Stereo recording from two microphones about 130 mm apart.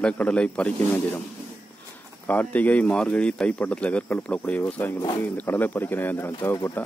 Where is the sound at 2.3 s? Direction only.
10° left (ahead or behind).